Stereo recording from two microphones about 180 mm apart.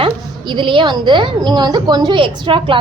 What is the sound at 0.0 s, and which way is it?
A woman's voice, 25° right (ahead or behind).